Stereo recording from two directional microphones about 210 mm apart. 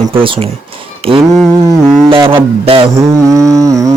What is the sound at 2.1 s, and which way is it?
Speech, 25° right (ahead or behind).